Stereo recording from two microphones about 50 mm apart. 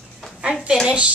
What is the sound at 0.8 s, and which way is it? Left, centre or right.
Speech, right.